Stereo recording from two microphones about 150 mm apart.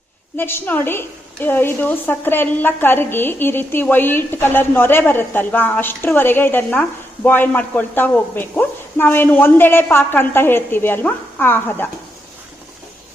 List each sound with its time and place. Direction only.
0.3 s a woman's voice: 15° left (ahead or behind)